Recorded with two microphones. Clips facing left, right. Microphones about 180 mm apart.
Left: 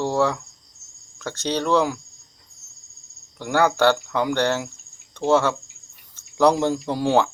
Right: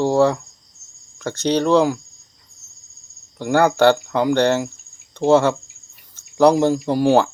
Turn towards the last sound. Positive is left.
turn(degrees=-5)  # may be behind; listen again after turning